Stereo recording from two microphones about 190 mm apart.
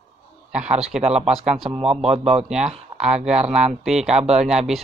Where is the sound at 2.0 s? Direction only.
35° right (ahead or behind).